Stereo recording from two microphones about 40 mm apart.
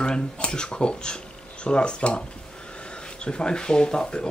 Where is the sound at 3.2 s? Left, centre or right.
Left.